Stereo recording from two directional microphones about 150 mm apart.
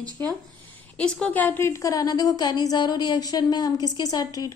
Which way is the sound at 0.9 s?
5° left (ahead or behind).